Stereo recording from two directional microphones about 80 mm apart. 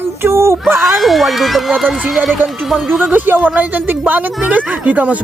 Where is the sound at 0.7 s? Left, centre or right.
Centre.